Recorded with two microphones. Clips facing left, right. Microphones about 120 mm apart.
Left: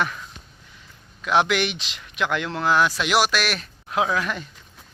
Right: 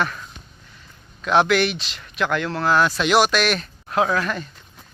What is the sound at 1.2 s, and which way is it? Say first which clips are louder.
Speech: right 3 dB; 10° left (ahead or behind).